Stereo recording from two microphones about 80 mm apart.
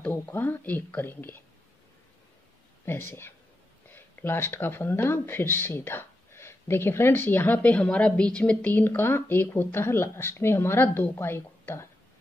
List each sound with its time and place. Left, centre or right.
0.0 s speech: left
2.8 s speech: left